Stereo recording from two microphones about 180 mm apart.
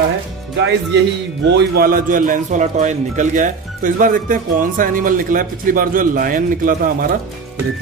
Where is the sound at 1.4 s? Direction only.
65° right (ahead or behind).